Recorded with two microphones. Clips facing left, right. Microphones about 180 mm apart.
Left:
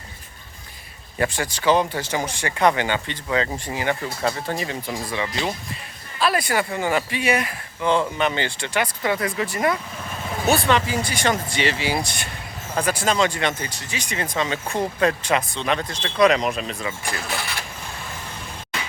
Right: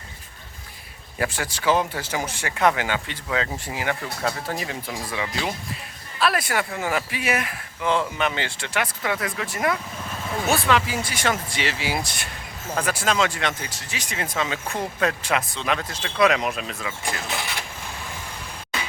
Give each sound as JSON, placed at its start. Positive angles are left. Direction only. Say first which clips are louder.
{"t": 1.2, "sound": "speech", "louder": "left 3 dB", "side_deg": -5}
{"t": 17.2, "sound": "speech", "louder": "left 1 dB", "side_deg": -20}